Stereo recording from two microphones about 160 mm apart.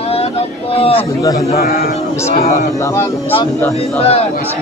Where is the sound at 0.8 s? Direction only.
35° left (ahead or behind).